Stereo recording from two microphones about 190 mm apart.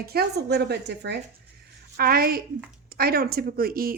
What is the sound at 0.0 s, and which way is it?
A woman's voice, 55° right (ahead or behind).